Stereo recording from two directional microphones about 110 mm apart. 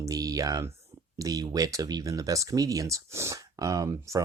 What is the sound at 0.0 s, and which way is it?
Speech, 30° right (ahead or behind).